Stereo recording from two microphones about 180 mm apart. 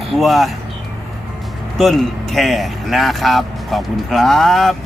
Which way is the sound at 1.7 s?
Centre (ahead or behind).